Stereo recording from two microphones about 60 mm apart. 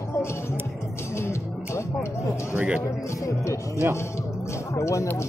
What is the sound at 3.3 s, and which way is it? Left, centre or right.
Speech, left.